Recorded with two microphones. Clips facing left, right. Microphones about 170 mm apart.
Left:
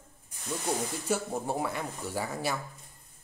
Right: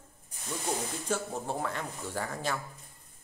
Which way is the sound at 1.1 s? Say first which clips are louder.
Left 2 dB; 10° left (ahead or behind).